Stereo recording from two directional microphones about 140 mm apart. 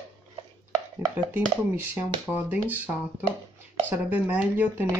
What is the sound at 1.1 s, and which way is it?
Speech, 10° right (ahead or behind).